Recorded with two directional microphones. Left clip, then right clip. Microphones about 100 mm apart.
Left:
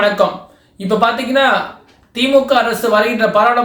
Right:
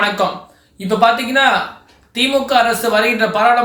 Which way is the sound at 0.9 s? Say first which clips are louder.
Right 1 dB; 35° left (ahead or behind).